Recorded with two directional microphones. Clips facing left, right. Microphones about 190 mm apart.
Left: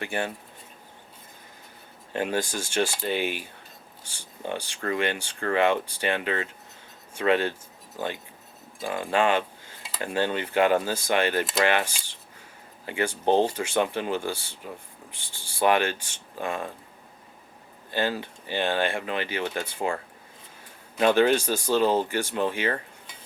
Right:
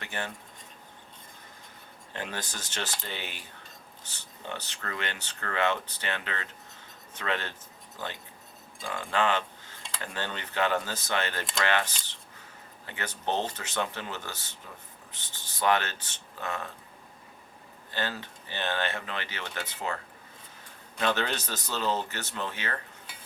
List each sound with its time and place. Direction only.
0.0 s speech: 10° left (ahead or behind)
2.1 s speech: 10° left (ahead or behind)
8.8 s speech: 20° left (ahead or behind)
9.8 s dishes: 5° left (ahead or behind)
10.2 s speech: 10° left (ahead or behind)
17.9 s speech: 10° left (ahead or behind)
21.1 s speech: 10° left (ahead or behind)